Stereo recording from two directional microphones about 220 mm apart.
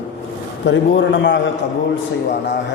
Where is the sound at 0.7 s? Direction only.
55° left (ahead or behind).